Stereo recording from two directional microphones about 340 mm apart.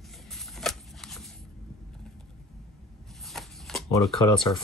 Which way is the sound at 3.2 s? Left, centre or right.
Centre.